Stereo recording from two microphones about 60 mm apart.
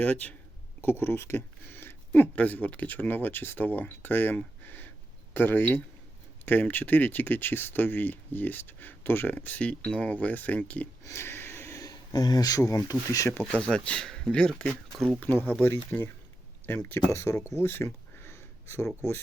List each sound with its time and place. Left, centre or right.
0.0 s speech: left
0.8 s speech: left
4.4 s a sound: left
5.3 s speech: left
9.6 s speech: left
11.0 s a sound: left
11.8 s speech: left
13.5 s speech: centre
15.4 s speech: left
17.1 s speech: left
17.6 s a sound: left